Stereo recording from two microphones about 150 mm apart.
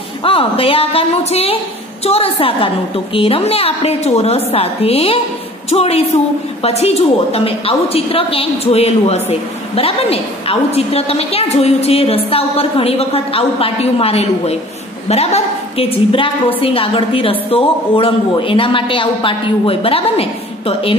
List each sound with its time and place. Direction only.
0.2 s a woman's voice: 40° left (ahead or behind)